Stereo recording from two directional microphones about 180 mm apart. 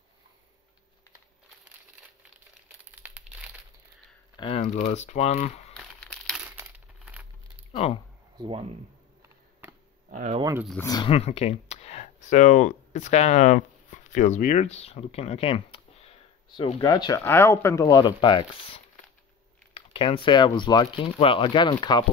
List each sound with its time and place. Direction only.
3.0 s crumpling: 5° right (ahead or behind)
4.4 s speech: 35° left (ahead or behind)
5.8 s crumpling: centre (ahead or behind)
7.7 s speech: 35° left (ahead or behind)
8.4 s speech: 30° right (ahead or behind)
10.0 s speech: 40° right (ahead or behind)
10.8 s speech: 20° left (ahead or behind)
11.1 s speech: 35° left (ahead or behind)